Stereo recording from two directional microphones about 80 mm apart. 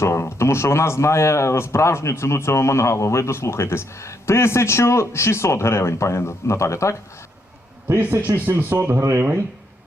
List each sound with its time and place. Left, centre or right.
0.0 s speech: left
7.9 s speech: right